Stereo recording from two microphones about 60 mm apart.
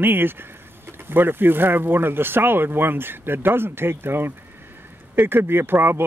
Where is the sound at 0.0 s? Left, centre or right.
Right.